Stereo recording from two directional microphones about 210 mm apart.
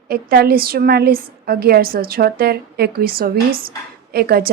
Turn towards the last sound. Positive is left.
turn(degrees=-50)  # may be behind; listen again after turning